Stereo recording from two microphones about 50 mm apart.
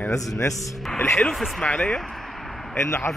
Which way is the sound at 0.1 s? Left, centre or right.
Left.